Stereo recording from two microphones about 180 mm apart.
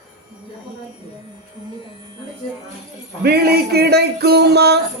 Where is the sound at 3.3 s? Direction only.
60° right (ahead or behind).